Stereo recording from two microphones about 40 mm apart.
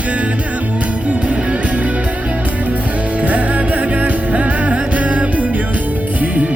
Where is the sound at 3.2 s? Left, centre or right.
Right.